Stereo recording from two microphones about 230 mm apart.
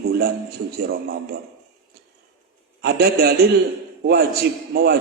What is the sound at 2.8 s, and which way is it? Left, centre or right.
A man's voice, right.